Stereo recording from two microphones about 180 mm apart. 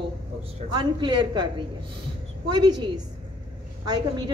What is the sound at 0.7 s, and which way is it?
Speech, 25° right (ahead or behind).